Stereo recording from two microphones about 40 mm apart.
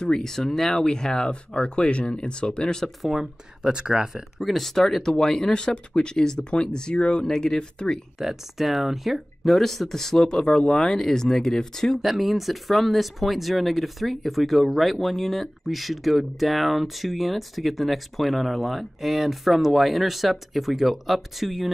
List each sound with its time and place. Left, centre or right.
0.1 s speech: centre
3.0 s speech: centre
4.1 s speech: centre
8.2 s speech: centre
12.0 s speech: centre